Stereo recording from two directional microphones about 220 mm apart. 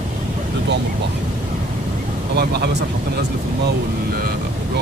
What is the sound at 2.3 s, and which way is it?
Speech, 50° right (ahead or behind).